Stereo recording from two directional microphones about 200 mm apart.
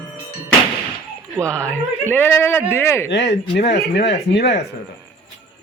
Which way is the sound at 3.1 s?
60° left (ahead or behind).